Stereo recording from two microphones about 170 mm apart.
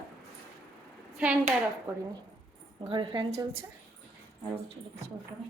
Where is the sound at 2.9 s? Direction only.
30° right (ahead or behind).